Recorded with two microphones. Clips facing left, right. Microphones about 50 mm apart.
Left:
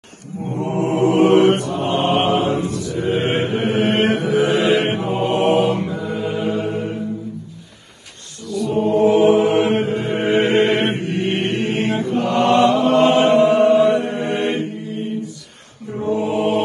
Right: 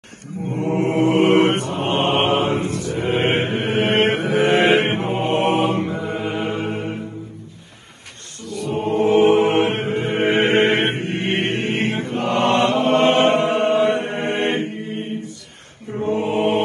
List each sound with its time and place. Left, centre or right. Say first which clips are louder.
0.6 s mantra: even; right
8.5 s mantra: left 4 dB; right